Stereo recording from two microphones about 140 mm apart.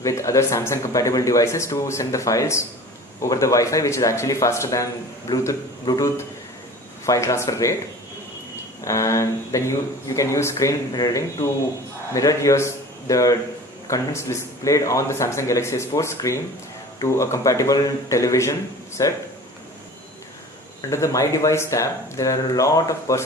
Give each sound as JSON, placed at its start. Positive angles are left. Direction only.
{"t": 0.0, "sound": "speech", "side_deg": 20}
{"t": 8.8, "sound": "a man's voice", "side_deg": 20}
{"t": 20.9, "sound": "speech", "side_deg": 20}